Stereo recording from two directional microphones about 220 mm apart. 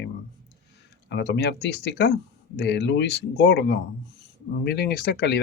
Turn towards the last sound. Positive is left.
turn(degrees=45)  # may be behind; listen again after turning